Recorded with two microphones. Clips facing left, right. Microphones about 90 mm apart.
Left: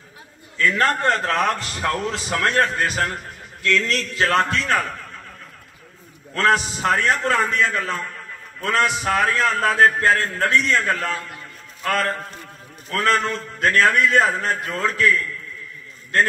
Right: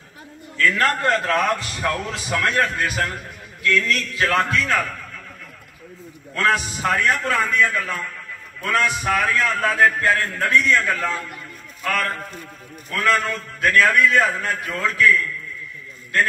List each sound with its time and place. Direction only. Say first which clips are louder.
0.6 s a man's voice: even; 25° left (ahead or behind)
6.3 s a man's voice: left 2 dB; 25° left (ahead or behind)